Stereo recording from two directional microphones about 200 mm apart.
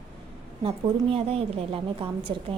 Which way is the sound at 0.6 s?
30° right (ahead or behind).